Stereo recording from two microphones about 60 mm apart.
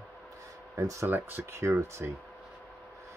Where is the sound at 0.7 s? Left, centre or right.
Right.